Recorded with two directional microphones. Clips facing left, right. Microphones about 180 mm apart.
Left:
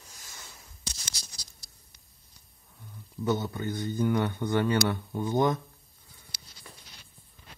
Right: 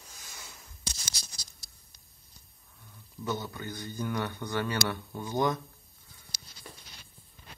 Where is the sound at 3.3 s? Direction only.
20° left (ahead or behind).